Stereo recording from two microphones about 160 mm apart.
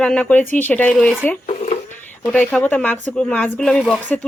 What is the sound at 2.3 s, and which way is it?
Speech, 5° left (ahead or behind).